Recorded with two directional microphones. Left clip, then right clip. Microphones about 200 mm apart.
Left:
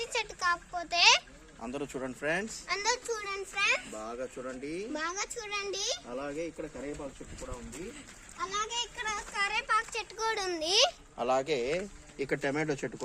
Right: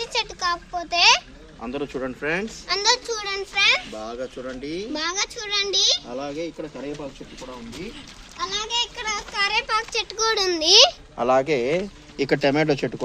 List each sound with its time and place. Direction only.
0.0 s a sound: 20° left (ahead or behind)
1.6 s speech: 45° left (ahead or behind)
2.6 s a child's voice: 20° left (ahead or behind)
8.4 s speech: centre (ahead or behind); by 12.9 s 40° right (ahead or behind)